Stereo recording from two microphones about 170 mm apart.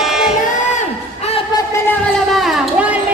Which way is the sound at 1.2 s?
40° left (ahead or behind).